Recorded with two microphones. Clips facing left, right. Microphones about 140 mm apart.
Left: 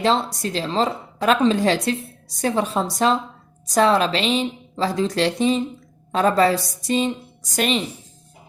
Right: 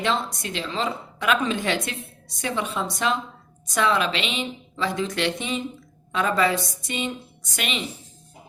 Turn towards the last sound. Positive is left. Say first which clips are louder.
# left 9 dB
turn(degrees=40)  # may be behind; listen again after turning